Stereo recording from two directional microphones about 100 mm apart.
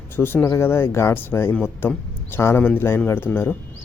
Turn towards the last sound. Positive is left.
turn(degrees=20)  # may be behind; listen again after turning